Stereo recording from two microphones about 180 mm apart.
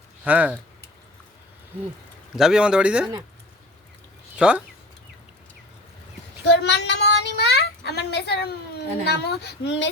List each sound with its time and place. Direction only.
0.3 s speech: 10° right (ahead or behind)
2.3 s speech: 5° right (ahead or behind)
4.4 s speech: 5° right (ahead or behind)
6.5 s a child's voice: 70° left (ahead or behind)